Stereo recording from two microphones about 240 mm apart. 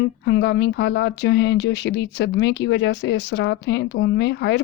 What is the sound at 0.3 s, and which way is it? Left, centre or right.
Speech, left.